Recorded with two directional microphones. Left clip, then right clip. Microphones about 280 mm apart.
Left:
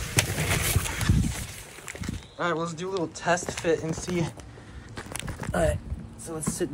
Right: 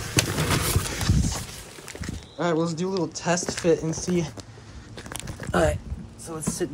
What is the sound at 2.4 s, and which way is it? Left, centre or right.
Speech, centre.